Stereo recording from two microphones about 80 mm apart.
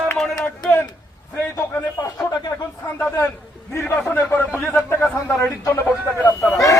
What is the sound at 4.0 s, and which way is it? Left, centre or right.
Speech, centre.